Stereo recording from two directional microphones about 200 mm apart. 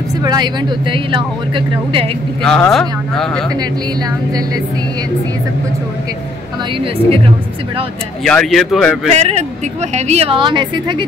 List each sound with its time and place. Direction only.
0.2 s speech: 20° right (ahead or behind)
2.4 s speech: 5° left (ahead or behind)
8.2 s speech: 5° left (ahead or behind)
9.1 s speech: 35° right (ahead or behind)